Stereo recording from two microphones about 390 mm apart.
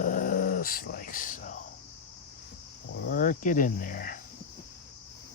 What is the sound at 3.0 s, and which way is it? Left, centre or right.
Speech, left.